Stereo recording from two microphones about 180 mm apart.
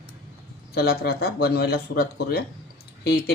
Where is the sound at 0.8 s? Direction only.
60° left (ahead or behind).